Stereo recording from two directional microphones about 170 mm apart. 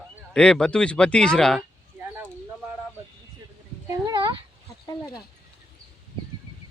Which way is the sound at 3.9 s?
25° right (ahead or behind).